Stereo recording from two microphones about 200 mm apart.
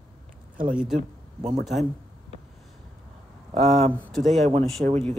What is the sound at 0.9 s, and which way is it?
Speech, 30° right (ahead or behind).